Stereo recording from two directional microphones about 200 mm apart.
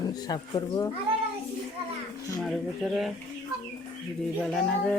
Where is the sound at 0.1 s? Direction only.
20° left (ahead or behind).